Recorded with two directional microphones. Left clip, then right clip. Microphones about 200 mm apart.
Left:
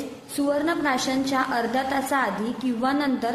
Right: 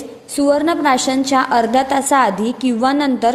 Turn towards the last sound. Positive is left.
turn(degrees=-35)  # may be behind; listen again after turning